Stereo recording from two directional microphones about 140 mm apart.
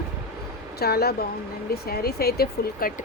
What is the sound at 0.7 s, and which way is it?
Speech, 90° left.